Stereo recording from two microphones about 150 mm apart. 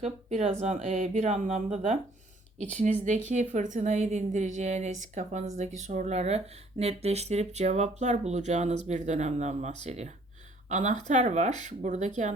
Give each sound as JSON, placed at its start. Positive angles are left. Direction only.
{"t": 0.0, "sound": "speech", "side_deg": -50}